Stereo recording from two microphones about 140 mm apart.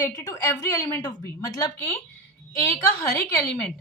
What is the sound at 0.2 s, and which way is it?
A woman's voice, 20° left (ahead or behind).